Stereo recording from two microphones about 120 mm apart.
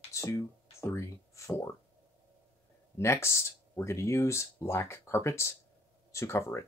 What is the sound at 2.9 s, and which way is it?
Speech, 25° left (ahead or behind).